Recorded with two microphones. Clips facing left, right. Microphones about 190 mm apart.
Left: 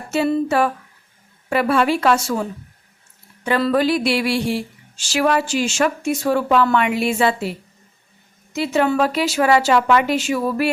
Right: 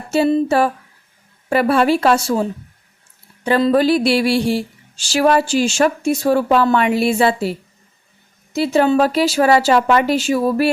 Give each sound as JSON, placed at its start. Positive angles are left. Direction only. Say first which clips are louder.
{"t": 0.4, "sound": "speech", "louder": "right 2 dB", "side_deg": -35}
{"t": 3.6, "sound": "speech", "louder": "right 4 dB", "side_deg": -30}
{"t": 8.5, "sound": "speech", "louder": "right 4 dB", "side_deg": -35}